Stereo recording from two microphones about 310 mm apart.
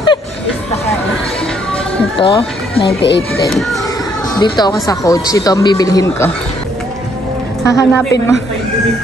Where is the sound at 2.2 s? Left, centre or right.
Centre.